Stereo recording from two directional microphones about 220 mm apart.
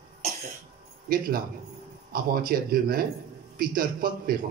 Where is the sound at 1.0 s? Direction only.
40° right (ahead or behind).